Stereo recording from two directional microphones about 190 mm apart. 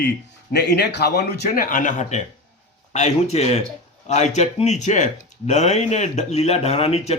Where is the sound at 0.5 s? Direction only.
60° left (ahead or behind).